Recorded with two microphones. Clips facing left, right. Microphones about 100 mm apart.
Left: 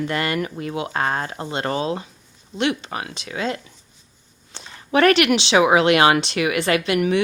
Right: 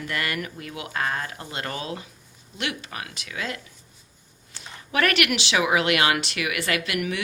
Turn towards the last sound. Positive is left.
turn(degrees=30)  # may be behind; listen again after turning